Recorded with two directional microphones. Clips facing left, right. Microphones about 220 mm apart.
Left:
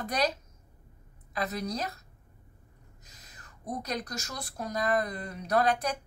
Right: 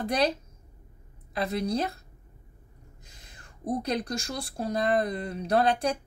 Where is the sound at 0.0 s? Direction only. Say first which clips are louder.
Right 4 dB; 30° right (ahead or behind).